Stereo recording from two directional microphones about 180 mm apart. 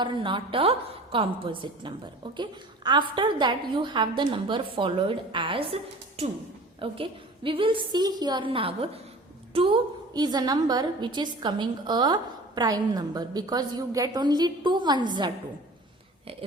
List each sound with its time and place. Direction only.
0.0 s a woman's voice: 25° right (ahead or behind)